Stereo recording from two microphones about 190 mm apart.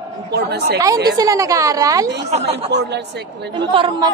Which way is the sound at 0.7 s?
15° right (ahead or behind).